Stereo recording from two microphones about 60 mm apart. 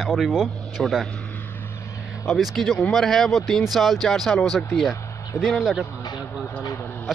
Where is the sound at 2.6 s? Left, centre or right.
Centre.